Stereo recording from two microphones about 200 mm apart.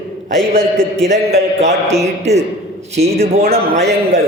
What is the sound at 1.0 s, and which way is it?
Speech, 35° right (ahead or behind).